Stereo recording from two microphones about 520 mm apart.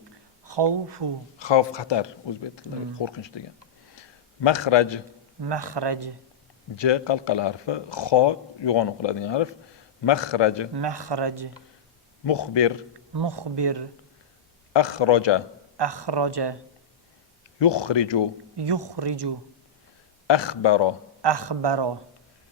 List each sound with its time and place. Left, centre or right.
0.4 s speech: right
1.4 s speech: left
4.4 s a man's voice: left
5.4 s speech: right
6.7 s speech: left
10.8 s speech: right
12.2 s speech: left
13.1 s speech: right
14.7 s speech: left
15.8 s speech: right
17.6 s speech: left
18.5 s speech: right
20.2 s speech: left
21.2 s speech: right